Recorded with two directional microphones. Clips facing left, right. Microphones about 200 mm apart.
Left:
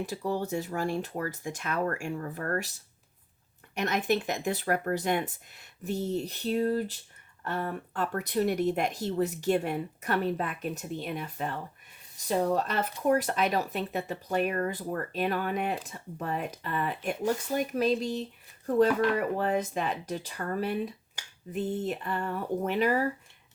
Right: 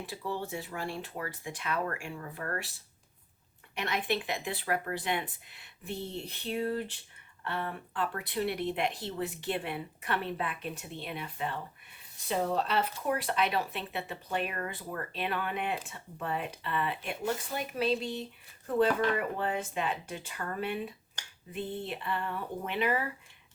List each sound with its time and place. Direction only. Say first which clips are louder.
0.0 s speech: left 5 dB; 40° left (ahead or behind)
3.8 s speech: left 5 dB; 45° left (ahead or behind)
19.4 s speech: left 4 dB; 40° left (ahead or behind)